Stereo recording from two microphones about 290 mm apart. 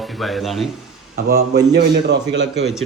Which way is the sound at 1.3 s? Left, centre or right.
Right.